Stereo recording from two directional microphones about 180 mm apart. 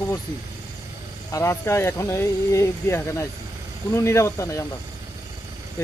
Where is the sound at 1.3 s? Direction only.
15° left (ahead or behind).